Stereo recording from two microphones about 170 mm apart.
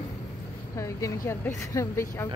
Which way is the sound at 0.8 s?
20° left (ahead or behind).